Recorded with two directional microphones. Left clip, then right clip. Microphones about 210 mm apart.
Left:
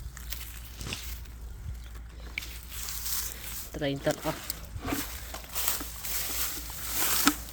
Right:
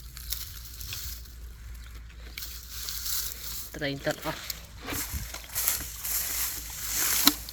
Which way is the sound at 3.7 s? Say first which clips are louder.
Left 1 dB; 5° left (ahead or behind).